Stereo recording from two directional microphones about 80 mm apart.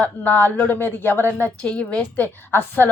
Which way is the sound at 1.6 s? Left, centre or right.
Centre.